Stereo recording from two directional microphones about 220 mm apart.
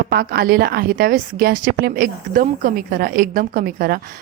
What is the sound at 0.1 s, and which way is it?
A woman's voice, 45° right (ahead or behind).